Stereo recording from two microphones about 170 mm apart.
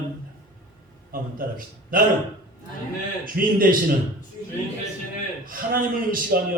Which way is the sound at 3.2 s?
55° right (ahead or behind).